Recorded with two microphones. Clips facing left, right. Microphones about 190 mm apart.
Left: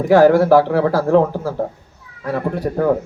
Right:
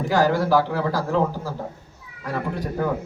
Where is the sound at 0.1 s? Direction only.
60° left (ahead or behind).